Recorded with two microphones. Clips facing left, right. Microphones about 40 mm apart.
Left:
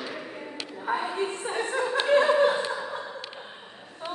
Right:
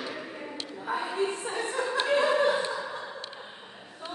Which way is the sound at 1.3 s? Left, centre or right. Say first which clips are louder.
Left 3 dB; left.